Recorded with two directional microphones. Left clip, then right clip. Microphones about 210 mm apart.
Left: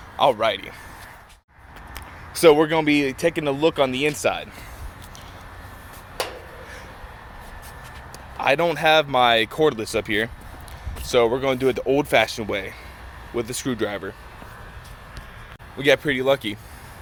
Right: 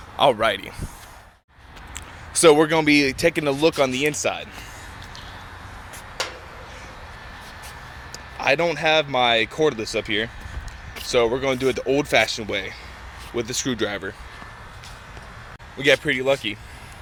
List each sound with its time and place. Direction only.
0.2 s speech: 30° right (ahead or behind)
2.3 s speech: 10° right (ahead or behind)
6.2 s a sound: 50° left (ahead or behind)
8.4 s speech: centre (ahead or behind)
15.8 s speech: 5° left (ahead or behind)